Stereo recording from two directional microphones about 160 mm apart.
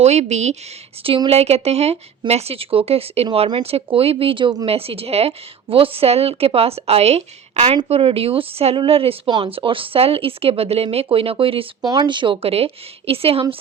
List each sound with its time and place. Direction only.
0.0 s speech: 45° right (ahead or behind)
1.0 s speech: 35° right (ahead or behind)